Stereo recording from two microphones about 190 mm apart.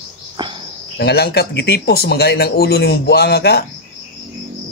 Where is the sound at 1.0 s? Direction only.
55° left (ahead or behind).